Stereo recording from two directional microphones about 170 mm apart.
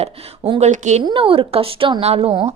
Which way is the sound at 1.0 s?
30° right (ahead or behind).